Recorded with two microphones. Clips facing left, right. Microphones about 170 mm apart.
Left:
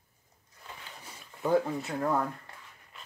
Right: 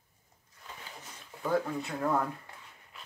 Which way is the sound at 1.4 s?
20° left (ahead or behind).